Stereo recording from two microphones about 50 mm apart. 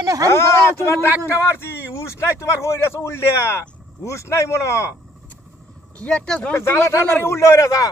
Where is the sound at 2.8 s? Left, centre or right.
Left.